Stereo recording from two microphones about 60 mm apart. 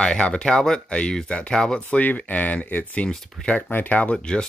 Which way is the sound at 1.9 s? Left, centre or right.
Left.